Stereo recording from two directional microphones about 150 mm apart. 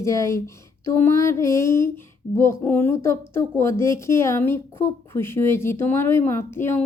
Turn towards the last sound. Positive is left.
turn(degrees=15)  # may be behind; listen again after turning